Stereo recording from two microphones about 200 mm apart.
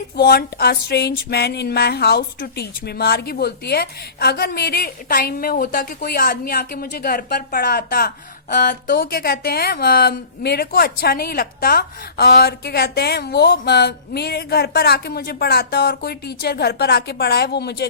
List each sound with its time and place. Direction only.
0.2 s a woman's voice: 55° left (ahead or behind)